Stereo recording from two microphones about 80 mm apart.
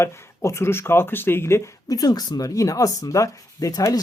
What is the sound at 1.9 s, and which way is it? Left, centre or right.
Speech, left.